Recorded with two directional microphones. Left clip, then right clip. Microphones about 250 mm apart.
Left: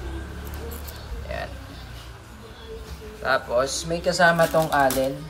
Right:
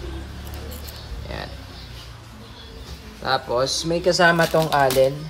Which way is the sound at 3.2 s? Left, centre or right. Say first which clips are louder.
Even; right.